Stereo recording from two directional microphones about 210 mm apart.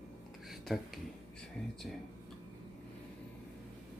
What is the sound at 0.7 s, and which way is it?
Speech, centre (ahead or behind).